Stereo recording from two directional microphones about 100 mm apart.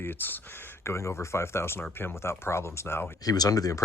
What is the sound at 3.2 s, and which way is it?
Speech, 40° left (ahead or behind).